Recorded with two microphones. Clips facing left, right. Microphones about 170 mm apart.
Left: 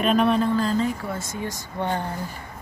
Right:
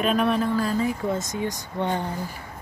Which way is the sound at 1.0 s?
20° right (ahead or behind).